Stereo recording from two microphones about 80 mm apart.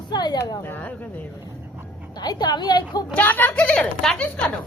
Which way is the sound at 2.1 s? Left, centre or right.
Left.